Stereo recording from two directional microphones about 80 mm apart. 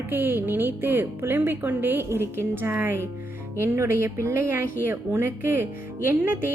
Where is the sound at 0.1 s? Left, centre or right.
Right.